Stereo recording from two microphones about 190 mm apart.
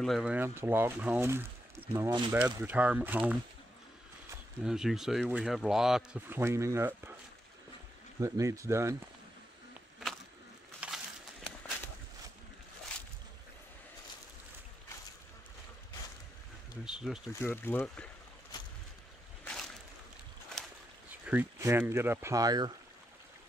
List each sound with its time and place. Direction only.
0.0 s speech: centre (ahead or behind)
2.0 s speech: 20° right (ahead or behind)
2.3 s speech: 10° right (ahead or behind)
4.6 s speech: centre (ahead or behind)
8.2 s speech: 15° right (ahead or behind)
10.8 s a sound: 5° right (ahead or behind)
16.8 s speech: 5° right (ahead or behind)
17.3 s speech: 10° left (ahead or behind)
19.4 s a sound: 5° left (ahead or behind)
21.3 s speech: 10° right (ahead or behind)